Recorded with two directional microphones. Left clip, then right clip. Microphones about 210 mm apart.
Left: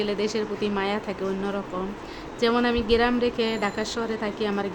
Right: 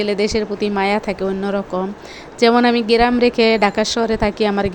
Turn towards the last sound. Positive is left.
turn(degrees=-35)  # may be behind; listen again after turning